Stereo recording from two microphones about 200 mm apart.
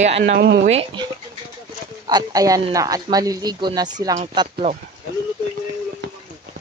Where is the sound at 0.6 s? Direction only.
30° right (ahead or behind).